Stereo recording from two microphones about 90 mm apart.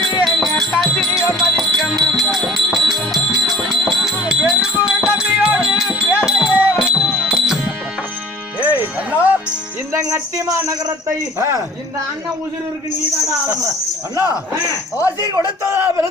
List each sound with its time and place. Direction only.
0.3 s music: centre (ahead or behind)
8.5 s music: 20° right (ahead or behind)
10.3 s a sound: 35° right (ahead or behind)
11.3 s speech: 30° right (ahead or behind)
15.6 s speech: 30° right (ahead or behind)